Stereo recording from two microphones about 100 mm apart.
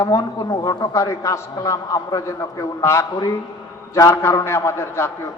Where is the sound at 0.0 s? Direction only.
35° left (ahead or behind).